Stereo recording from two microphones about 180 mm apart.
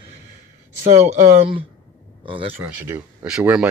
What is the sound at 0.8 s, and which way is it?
Speech, 35° right (ahead or behind).